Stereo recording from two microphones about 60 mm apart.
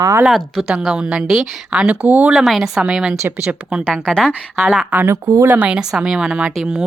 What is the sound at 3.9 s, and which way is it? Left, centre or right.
Speech, centre.